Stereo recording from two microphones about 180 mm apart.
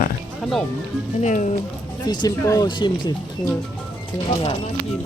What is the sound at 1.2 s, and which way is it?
Speech, 40° left (ahead or behind).